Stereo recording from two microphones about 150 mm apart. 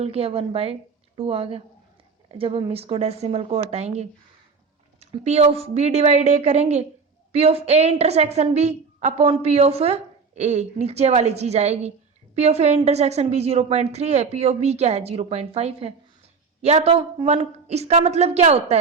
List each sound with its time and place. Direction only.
0.0 s a woman's voice: 40° right (ahead or behind)